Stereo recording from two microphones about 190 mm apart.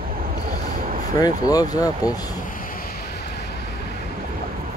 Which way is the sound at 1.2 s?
20° left (ahead or behind).